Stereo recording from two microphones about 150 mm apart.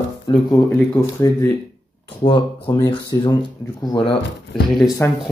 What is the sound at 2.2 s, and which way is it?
Speech, 40° left (ahead or behind).